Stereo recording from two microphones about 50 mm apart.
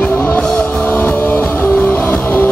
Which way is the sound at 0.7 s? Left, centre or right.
Left.